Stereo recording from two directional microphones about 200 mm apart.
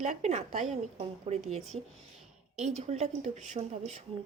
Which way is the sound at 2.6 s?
35° right (ahead or behind).